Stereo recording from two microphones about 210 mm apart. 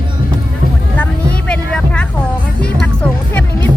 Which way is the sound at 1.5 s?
5° left (ahead or behind).